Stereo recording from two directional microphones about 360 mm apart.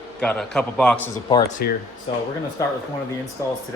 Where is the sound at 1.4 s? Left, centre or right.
Left.